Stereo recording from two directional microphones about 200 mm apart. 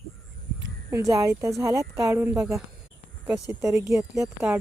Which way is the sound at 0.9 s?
15° right (ahead or behind).